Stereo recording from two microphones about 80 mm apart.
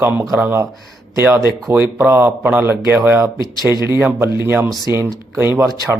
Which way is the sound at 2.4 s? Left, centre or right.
Right.